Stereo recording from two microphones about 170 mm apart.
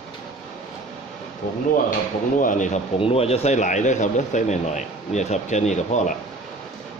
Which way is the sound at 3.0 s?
35° left (ahead or behind).